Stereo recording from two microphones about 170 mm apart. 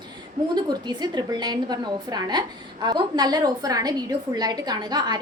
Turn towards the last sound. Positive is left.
turn(degrees=-25)  # may be behind; listen again after turning